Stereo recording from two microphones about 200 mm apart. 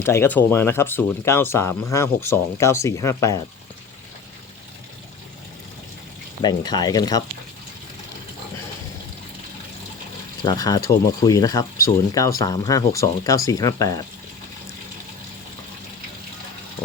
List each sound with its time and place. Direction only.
0.0 s speech: 10° left (ahead or behind)
6.4 s speech: 20° left (ahead or behind)
10.4 s speech: 20° left (ahead or behind)